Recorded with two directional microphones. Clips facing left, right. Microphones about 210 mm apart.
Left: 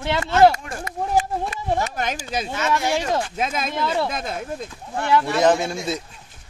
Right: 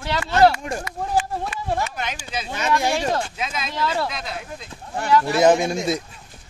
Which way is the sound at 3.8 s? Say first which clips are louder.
Even; 20° left (ahead or behind).